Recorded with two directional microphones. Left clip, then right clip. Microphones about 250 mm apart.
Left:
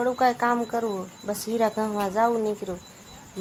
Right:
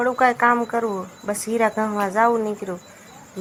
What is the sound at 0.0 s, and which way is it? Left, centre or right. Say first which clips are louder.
Speech: right 5 dB; centre.